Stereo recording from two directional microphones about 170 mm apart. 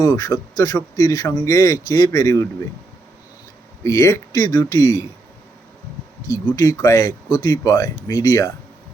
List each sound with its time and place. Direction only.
0.0 s a man's voice: 20° left (ahead or behind)
3.8 s a man's voice: 20° left (ahead or behind)
6.3 s a man's voice: 20° left (ahead or behind)